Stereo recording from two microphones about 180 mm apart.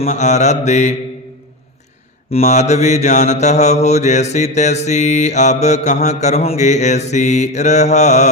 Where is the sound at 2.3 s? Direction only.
40° left (ahead or behind).